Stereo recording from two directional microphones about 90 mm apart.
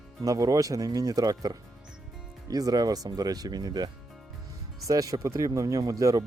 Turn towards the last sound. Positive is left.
turn(degrees=-40)  # may be behind; listen again after turning